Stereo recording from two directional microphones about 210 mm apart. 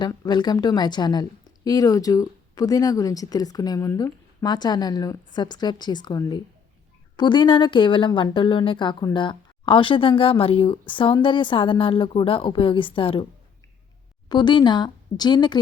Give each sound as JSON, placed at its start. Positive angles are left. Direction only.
{"t": 0.0, "sound": "a woman's voice", "side_deg": 20}
{"t": 14.3, "sound": "speech", "side_deg": 20}